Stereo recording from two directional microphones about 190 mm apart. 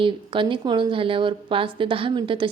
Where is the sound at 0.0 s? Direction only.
25° right (ahead or behind).